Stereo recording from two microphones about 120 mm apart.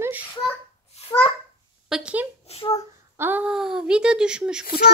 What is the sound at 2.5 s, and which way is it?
Speech, 55° left (ahead or behind).